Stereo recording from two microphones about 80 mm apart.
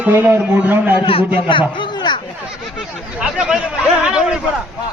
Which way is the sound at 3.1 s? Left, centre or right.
Centre.